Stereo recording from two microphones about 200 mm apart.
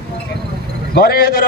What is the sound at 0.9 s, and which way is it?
Speech, 50° left (ahead or behind).